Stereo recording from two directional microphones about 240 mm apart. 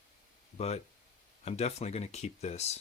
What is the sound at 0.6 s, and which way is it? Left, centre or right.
Speech, left.